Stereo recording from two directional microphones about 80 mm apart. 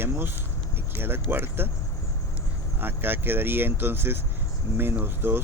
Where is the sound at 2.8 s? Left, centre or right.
Right.